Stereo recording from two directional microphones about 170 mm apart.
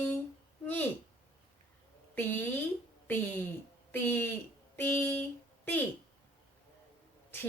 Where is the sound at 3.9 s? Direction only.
10° left (ahead or behind).